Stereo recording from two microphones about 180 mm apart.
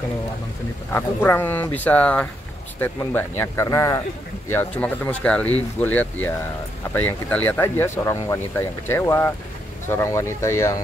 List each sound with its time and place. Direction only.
0.9 s speech: 10° left (ahead or behind)